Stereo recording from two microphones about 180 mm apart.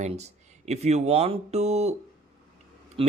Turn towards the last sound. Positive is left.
turn(degrees=-30)  # may be behind; listen again after turning